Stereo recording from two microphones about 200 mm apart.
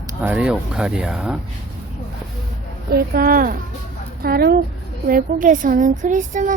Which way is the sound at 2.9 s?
50° right (ahead or behind).